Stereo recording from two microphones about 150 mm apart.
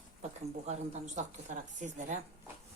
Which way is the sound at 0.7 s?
50° right (ahead or behind).